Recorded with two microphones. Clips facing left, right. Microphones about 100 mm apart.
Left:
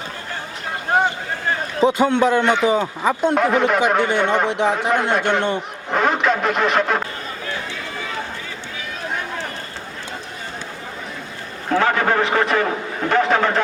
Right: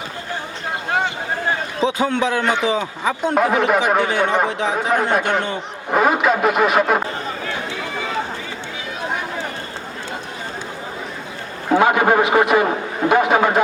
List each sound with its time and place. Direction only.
2.2 s a man's voice: 5° right (ahead or behind)
11.7 s a man's voice: 15° right (ahead or behind)